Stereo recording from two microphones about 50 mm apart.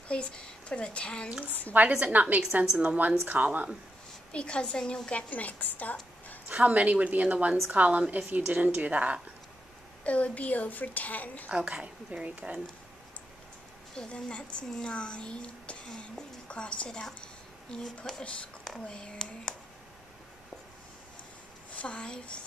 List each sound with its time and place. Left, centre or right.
0.1 s speech: centre
1.4 s speech: left
1.9 s a woman's voice: centre
2.1 s a woman's voice: right
4.3 s speech: left
5.3 s speech: left
6.5 s a woman's voice: right
10.0 s speech: left
11.5 s a woman's voice: centre
13.9 s a woman's voice: left
21.7 s speech: left